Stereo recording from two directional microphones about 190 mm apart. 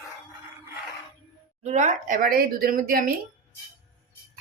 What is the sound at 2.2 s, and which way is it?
Speech, 50° right (ahead or behind).